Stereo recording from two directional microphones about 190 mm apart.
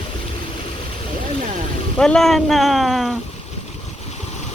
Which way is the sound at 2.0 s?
5° left (ahead or behind).